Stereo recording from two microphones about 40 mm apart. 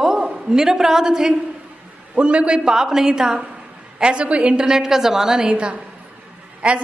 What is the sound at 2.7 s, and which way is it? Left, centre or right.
A woman's voice, centre.